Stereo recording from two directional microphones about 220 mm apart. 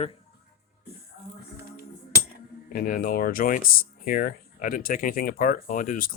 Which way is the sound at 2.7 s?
40° left (ahead or behind).